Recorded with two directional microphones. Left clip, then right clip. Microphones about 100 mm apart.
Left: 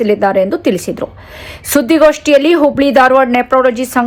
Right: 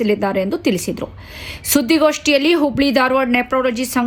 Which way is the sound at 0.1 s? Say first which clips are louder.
Left 7 dB; 45° left (ahead or behind).